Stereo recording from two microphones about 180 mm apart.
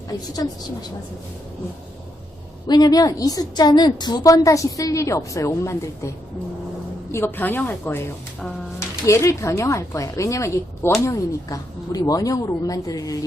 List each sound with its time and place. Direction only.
0.1 s a woman's voice: 20° left (ahead or behind)
2.6 s a woman's voice: 20° left (ahead or behind)
7.1 s a woman's voice: 10° left (ahead or behind)